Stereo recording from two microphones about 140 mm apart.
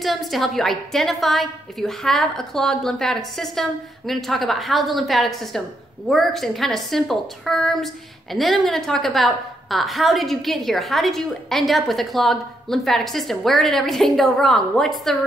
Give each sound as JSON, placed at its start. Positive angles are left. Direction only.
{"t": 0.0, "sound": "a woman's voice", "side_deg": 0}